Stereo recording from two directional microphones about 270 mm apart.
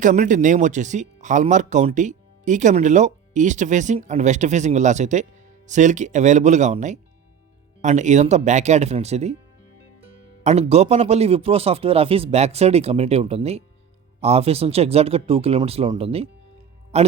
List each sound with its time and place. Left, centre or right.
0.0 s speech: right
10.4 s speech: right